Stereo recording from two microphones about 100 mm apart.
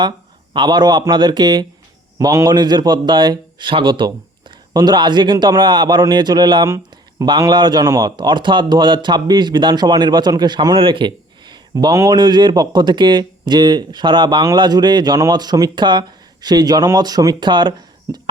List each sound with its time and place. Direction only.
0.5 s a man's voice: 50° right (ahead or behind)
2.1 s a man's voice: 35° right (ahead or behind)
6.7 s a sound: 30° right (ahead or behind)
7.3 s a man's voice: 45° right (ahead or behind)
10.8 s a man's voice: 60° right (ahead or behind)